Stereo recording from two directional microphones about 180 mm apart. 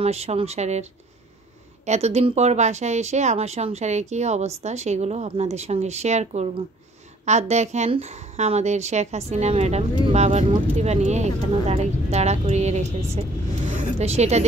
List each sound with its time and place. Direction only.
0.0 s a woman's voice: 35° right (ahead or behind)
1.9 s a woman's voice: 35° right (ahead or behind)
13.7 s a sound: 40° right (ahead or behind)